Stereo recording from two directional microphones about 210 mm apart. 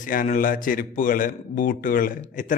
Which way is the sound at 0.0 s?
40° left (ahead or behind).